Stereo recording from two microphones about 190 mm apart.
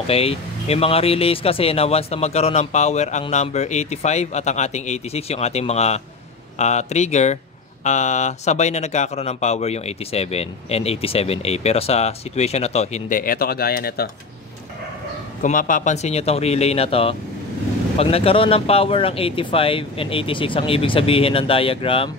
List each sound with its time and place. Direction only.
0.0 s speech: 30° left (ahead or behind); by 14.1 s 55° left (ahead or behind)
15.4 s speech: 45° left (ahead or behind); by 22.1 s 30° left (ahead or behind)